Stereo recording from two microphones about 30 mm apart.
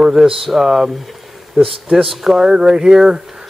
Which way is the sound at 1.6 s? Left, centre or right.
Right.